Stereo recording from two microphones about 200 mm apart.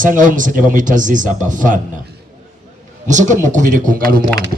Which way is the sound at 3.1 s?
40° right (ahead or behind).